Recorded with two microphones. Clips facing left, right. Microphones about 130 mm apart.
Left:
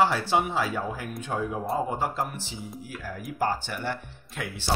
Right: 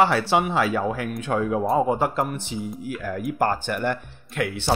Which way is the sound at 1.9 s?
65° right (ahead or behind).